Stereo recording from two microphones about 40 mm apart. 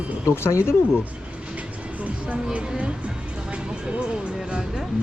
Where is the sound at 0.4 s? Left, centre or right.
Left.